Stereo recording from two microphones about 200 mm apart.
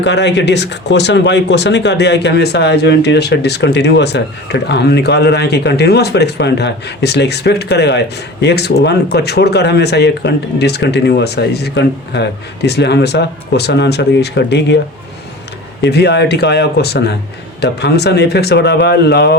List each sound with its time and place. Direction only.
0.0 s speech: 60° left (ahead or behind)
15.8 s speech: 55° left (ahead or behind)